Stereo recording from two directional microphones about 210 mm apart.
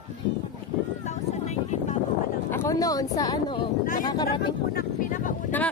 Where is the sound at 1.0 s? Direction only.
35° left (ahead or behind).